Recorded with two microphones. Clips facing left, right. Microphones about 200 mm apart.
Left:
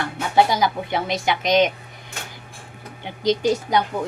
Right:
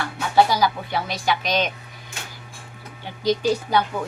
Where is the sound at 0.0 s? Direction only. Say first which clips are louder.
Even; 20° left (ahead or behind).